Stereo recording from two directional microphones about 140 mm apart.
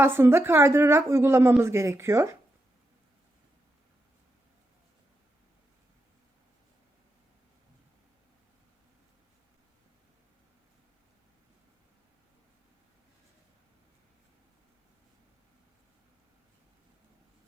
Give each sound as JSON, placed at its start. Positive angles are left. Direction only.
{"t": 0.0, "sound": "a woman's voice", "side_deg": -15}